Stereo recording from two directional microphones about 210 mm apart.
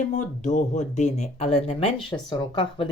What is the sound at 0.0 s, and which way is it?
Speech, 35° left (ahead or behind).